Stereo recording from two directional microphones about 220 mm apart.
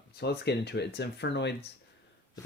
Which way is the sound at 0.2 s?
50° left (ahead or behind).